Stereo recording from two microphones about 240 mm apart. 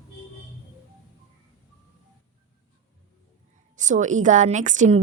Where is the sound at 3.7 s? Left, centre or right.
Right.